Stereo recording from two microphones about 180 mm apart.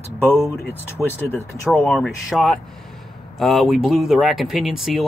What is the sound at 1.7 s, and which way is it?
Speech, centre (ahead or behind).